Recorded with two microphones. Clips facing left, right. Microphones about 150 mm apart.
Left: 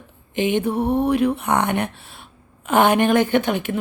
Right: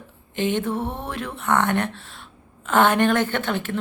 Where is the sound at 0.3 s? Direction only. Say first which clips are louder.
Left 3 dB; 15° left (ahead or behind).